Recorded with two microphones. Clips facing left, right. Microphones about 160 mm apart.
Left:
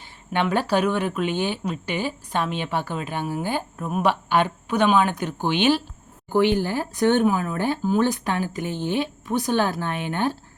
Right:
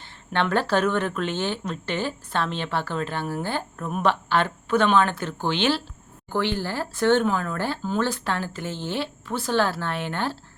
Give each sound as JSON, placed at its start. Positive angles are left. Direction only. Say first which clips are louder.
{"t": 0.3, "sound": "speech", "louder": "left 1 dB", "side_deg": 10}